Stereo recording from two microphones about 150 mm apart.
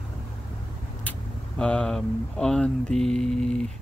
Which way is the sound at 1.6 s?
5° left (ahead or behind).